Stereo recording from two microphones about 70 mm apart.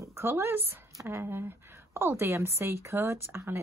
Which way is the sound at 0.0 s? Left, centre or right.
Right.